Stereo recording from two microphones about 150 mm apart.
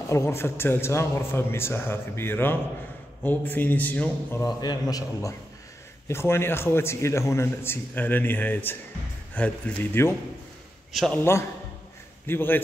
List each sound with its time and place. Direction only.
0.1 s a man's voice: 20° left (ahead or behind)
10.9 s a man's voice: centre (ahead or behind)
12.3 s a man's voice: 15° left (ahead or behind)